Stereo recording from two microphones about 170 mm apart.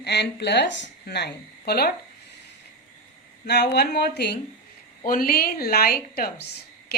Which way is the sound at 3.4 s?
80° left.